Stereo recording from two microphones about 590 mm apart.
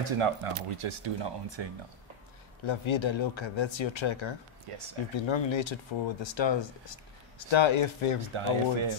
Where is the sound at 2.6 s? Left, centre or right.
Left.